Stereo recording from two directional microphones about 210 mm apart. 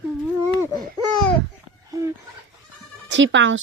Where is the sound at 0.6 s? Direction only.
15° left (ahead or behind).